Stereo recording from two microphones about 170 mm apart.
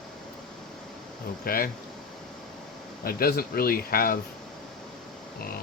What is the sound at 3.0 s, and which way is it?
Speech, 60° left (ahead or behind).